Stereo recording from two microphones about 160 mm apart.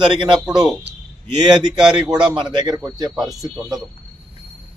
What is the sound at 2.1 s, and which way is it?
A man's voice, 25° right (ahead or behind).